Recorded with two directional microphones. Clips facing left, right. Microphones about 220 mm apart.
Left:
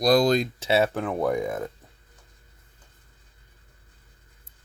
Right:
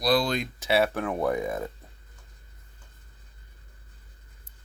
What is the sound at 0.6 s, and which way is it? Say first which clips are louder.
Speech: left 2 dB; 25° left (ahead or behind).